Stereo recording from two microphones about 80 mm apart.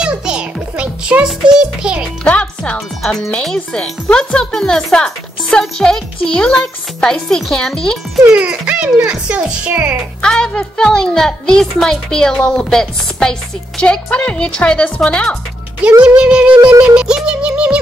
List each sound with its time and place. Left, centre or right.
0.0 s music: centre
2.2 s music: centre
3.0 s a child's voice: centre
8.4 s speech: centre
10.2 s a child's voice: centre
16.0 s speech: centre